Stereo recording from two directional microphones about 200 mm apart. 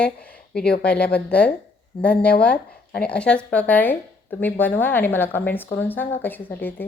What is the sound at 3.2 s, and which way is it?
A woman's voice, 5° left (ahead or behind).